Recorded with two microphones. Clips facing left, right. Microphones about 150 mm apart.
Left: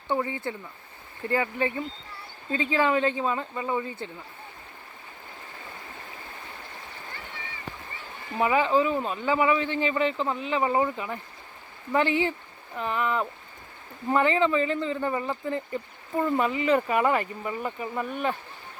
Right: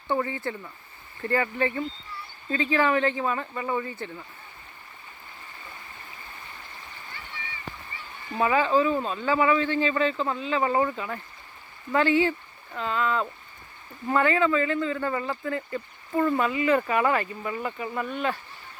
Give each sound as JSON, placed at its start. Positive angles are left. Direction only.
{"t": 0.1, "sound": "speech", "side_deg": 15}
{"t": 8.4, "sound": "speech", "side_deg": 15}